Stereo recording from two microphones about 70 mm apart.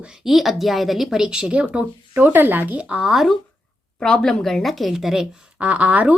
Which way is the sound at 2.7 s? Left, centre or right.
Centre.